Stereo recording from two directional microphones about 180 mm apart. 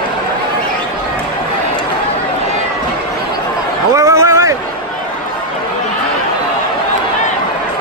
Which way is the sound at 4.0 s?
20° right (ahead or behind).